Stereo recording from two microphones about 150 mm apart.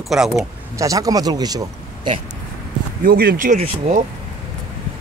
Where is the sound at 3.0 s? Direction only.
90° right.